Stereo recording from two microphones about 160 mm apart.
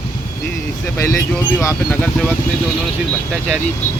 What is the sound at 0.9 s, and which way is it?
Speech, 20° left (ahead or behind).